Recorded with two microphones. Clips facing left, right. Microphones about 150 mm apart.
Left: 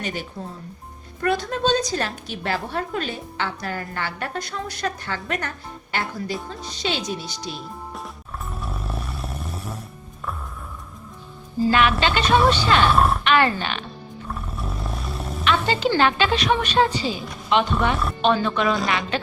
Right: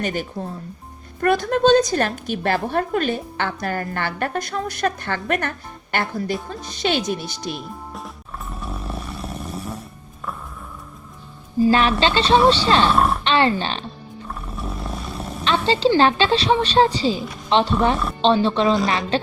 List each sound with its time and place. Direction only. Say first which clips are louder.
0.0 s a woman's voice: right 5 dB; 50° right (ahead or behind)
7.9 s music: even; centre (ahead or behind)
11.7 s a woman's voice: even; 35° right (ahead or behind)
12.9 s speech: right 1 dB; centre (ahead or behind)
13.2 s speech: right 1 dB; 30° right (ahead or behind)
14.3 s roar: right 1 dB; centre (ahead or behind)
15.4 s a sound: right 3 dB; 30° right (ahead or behind)
16.0 s a woman's voice: right 3 dB; 30° right (ahead or behind)